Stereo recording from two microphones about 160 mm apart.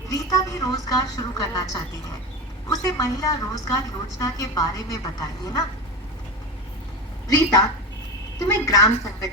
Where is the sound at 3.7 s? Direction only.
20° left (ahead or behind).